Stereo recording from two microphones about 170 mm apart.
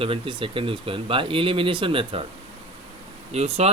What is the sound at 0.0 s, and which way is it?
Speech, 30° right (ahead or behind).